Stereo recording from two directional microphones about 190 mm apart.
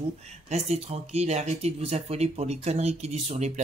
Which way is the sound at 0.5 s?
35° right (ahead or behind).